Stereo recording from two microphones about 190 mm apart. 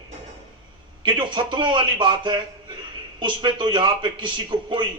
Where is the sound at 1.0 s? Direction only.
25° right (ahead or behind).